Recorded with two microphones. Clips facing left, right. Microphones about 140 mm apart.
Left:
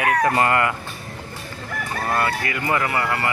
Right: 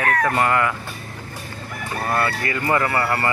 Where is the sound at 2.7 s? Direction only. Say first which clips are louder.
Right 2 dB; 15° left (ahead or behind).